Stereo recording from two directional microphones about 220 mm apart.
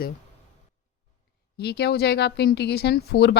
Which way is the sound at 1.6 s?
45° left (ahead or behind).